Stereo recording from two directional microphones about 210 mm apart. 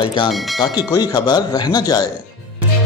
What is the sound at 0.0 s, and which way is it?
Speech, 20° left (ahead or behind).